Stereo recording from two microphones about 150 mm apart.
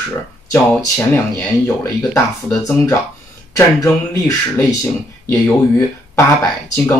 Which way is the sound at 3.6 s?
20° left (ahead or behind).